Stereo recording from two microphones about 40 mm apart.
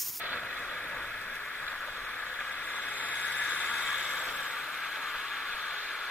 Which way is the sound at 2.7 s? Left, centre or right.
Left.